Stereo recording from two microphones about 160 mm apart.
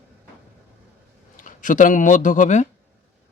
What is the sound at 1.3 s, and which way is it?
Speech, 55° left (ahead or behind).